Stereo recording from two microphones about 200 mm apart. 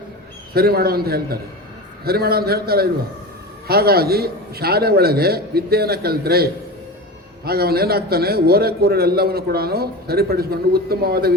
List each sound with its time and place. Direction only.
0.5 s a man's voice: 50° right (ahead or behind)